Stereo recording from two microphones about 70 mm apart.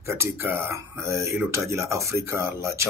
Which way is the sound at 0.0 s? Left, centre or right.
Right.